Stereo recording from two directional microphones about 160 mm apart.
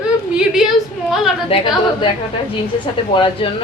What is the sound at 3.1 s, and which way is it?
Speech, 30° left (ahead or behind).